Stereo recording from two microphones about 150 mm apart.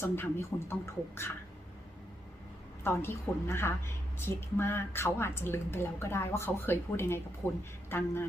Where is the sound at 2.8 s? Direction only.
15° left (ahead or behind).